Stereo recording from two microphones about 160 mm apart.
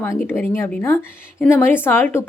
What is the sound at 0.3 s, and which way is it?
A woman's voice, 10° left (ahead or behind).